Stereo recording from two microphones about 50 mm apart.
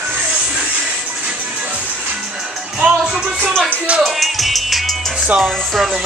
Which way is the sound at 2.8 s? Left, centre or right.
Centre.